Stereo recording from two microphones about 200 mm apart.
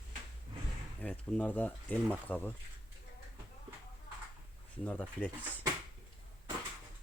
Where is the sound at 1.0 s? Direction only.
5° left (ahead or behind).